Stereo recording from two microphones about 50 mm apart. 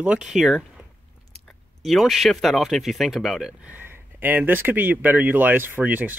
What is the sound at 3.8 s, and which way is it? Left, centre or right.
Speech, right.